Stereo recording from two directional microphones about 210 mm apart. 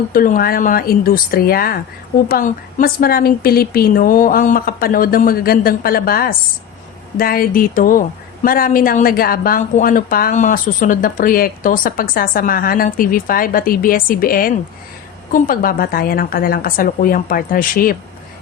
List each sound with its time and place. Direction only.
0.1 s a woman's voice: 40° left (ahead or behind)